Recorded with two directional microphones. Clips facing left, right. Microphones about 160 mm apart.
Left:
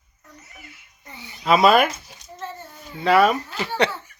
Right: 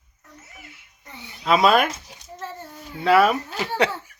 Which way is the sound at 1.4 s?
Centre (ahead or behind).